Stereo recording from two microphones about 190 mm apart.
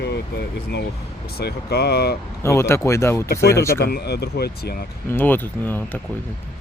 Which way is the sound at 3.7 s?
55° left (ahead or behind).